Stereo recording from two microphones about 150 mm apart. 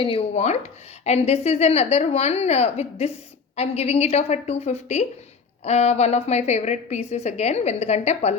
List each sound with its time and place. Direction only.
0.0 s speech: 40° left (ahead or behind)